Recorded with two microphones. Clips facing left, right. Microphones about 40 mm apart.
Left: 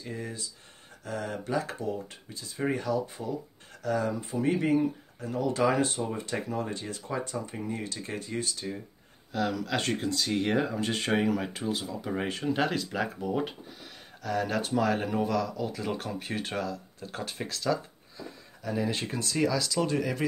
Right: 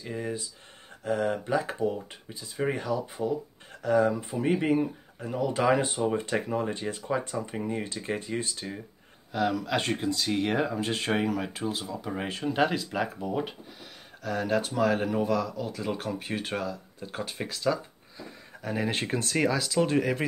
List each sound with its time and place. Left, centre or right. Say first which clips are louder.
0.0 s speech: right 4 dB; centre
9.3 s speech: right 2 dB; centre
18.6 s speech: right 1 dB; right